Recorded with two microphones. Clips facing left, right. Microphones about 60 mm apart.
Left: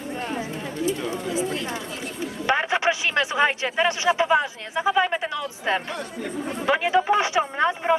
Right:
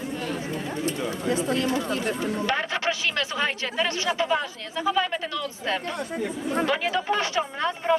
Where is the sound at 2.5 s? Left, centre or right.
Left.